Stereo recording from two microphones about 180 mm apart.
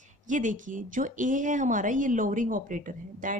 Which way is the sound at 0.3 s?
45° right (ahead or behind).